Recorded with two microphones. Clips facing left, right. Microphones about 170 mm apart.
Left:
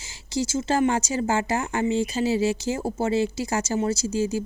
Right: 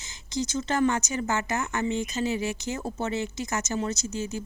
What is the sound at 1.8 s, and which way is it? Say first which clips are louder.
Speech: left 6 dB; 15° left (ahead or behind).